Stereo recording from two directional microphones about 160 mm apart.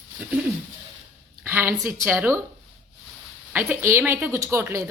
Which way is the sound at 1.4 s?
15° right (ahead or behind).